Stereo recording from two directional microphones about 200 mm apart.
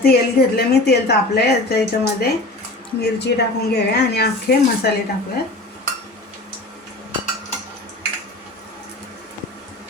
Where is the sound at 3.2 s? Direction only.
55° left (ahead or behind).